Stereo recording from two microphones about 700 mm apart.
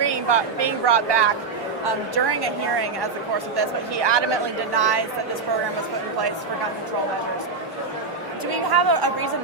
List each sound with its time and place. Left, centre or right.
0.0 s speech: right
8.5 s a woman's voice: right